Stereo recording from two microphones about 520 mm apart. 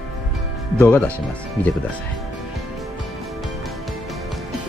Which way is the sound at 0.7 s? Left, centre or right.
Centre.